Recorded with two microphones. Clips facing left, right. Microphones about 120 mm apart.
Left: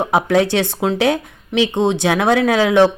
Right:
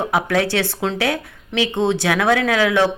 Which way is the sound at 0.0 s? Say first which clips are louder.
Left 4 dB; 20° left (ahead or behind).